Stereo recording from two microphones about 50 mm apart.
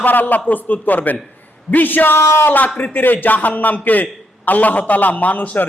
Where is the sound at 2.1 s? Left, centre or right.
Left.